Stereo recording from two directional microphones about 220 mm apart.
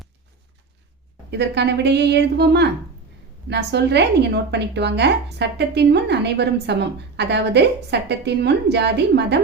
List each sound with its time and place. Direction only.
1.3 s a woman's voice: 50° right (ahead or behind)